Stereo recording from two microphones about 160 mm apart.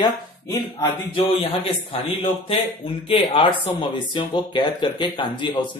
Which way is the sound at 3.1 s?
30° left (ahead or behind).